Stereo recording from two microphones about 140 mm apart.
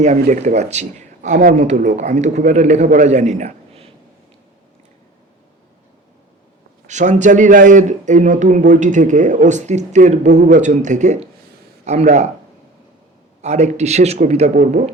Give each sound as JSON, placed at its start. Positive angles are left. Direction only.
{"t": 0.0, "sound": "a man's voice", "side_deg": -55}
{"t": 6.8, "sound": "a man's voice", "side_deg": -60}
{"t": 13.4, "sound": "a man's voice", "side_deg": -55}